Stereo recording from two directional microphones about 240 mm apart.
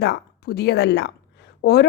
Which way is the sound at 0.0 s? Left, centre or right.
Left.